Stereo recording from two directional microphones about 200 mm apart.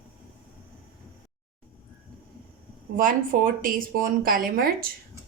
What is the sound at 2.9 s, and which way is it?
A woman's voice, 45° right (ahead or behind).